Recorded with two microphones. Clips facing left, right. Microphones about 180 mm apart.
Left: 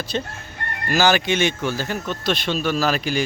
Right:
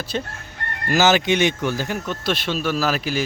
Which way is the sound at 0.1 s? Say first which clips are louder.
Even; 5° right (ahead or behind).